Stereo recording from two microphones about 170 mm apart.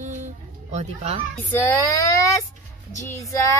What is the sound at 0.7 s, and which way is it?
Speech, 40° right (ahead or behind).